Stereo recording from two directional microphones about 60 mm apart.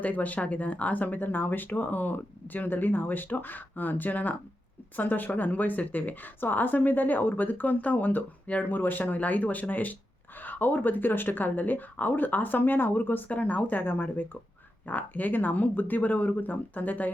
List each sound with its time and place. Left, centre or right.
0.0 s speech: left